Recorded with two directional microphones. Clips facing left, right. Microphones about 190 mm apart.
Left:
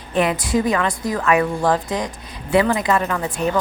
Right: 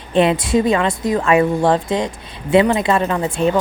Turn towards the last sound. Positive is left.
turn(degrees=-25)  # may be behind; listen again after turning